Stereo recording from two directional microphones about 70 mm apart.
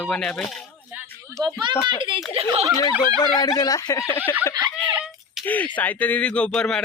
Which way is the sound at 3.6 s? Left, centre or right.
Left.